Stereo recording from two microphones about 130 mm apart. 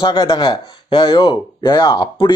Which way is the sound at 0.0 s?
35° left (ahead or behind).